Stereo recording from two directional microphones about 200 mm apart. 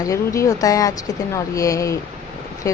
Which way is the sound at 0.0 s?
15° left (ahead or behind).